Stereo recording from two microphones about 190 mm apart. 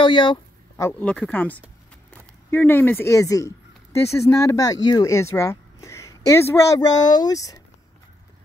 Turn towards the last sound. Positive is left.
turn(degrees=20)  # may be behind; listen again after turning